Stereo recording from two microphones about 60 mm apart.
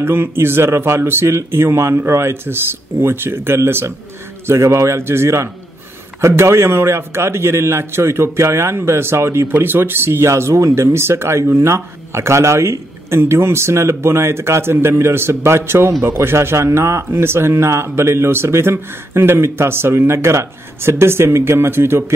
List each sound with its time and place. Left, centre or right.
0.0 s a man's voice: right